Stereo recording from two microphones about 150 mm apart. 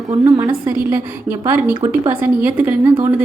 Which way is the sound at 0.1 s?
25° right (ahead or behind).